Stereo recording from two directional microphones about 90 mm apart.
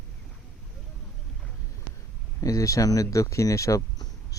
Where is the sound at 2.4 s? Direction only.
35° left (ahead or behind).